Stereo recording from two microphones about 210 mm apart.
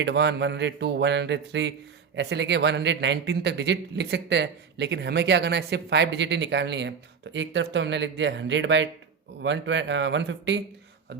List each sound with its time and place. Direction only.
0.0 s a man's voice: 55° right (ahead or behind)